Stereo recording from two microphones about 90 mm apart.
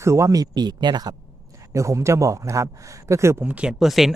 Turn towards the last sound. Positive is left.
turn(degrees=-5)  # may be behind; listen again after turning